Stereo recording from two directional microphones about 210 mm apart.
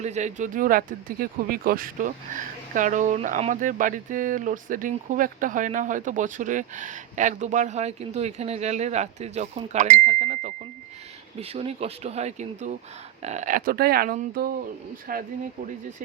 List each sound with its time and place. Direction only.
0.0 s speech: 35° right (ahead or behind)